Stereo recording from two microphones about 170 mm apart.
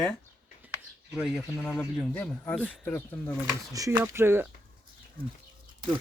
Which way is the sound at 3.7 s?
15° right (ahead or behind).